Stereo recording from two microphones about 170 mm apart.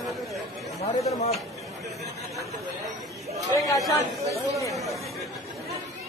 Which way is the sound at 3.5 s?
20° left (ahead or behind).